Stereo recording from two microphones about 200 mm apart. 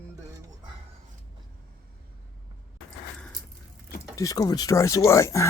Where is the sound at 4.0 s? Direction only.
15° left (ahead or behind).